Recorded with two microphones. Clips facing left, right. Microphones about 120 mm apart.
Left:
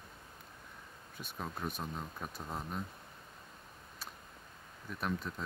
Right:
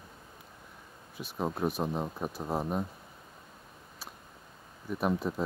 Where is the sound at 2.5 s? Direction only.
50° right (ahead or behind).